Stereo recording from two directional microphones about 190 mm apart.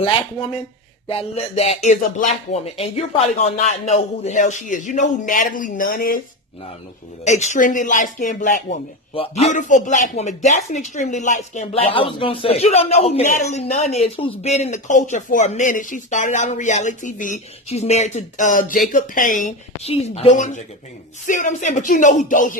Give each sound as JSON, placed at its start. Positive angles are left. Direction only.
{"t": 1.0, "sound": "speech", "side_deg": 30}
{"t": 7.2, "sound": "speech", "side_deg": 35}
{"t": 9.1, "sound": "speech", "side_deg": 30}